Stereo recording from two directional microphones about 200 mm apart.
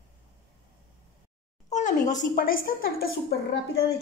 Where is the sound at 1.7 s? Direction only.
40° left (ahead or behind).